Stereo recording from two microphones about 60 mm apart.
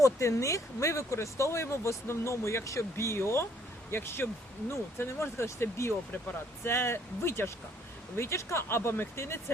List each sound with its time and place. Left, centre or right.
0.0 s speech: left